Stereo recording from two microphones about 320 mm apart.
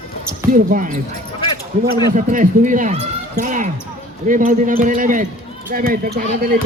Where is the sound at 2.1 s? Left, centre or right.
Right.